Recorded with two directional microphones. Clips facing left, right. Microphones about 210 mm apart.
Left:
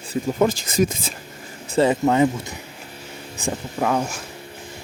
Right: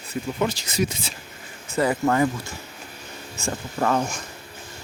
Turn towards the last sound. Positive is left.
turn(degrees=5)  # may be behind; listen again after turning